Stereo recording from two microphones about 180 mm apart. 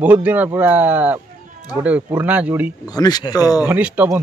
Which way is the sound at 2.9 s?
20° left (ahead or behind).